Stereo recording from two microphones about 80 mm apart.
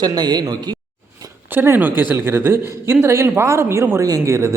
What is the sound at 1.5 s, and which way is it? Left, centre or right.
Speech, right.